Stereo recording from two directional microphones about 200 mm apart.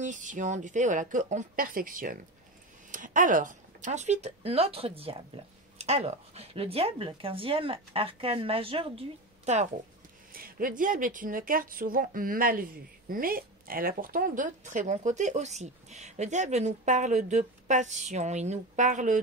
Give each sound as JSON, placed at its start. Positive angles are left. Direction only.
{"t": 0.0, "sound": "speech", "side_deg": -40}
{"t": 10.3, "sound": "speech", "side_deg": -45}